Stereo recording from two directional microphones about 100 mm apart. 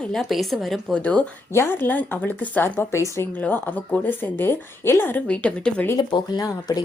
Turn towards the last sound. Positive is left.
turn(degrees=40)  # may be behind; listen again after turning